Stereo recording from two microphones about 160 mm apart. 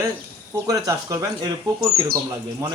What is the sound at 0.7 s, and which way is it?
Speech, 20° right (ahead or behind).